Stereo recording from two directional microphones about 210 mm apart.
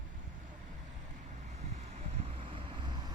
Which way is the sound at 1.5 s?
30° right (ahead or behind).